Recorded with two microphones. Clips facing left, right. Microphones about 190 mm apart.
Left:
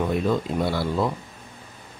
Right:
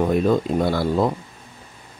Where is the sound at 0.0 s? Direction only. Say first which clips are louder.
Right 5 dB; 45° right (ahead or behind).